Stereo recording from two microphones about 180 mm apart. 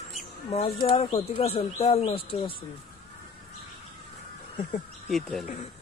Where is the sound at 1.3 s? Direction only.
30° left (ahead or behind).